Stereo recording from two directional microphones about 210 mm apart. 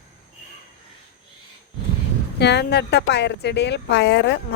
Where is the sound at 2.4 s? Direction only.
55° left (ahead or behind).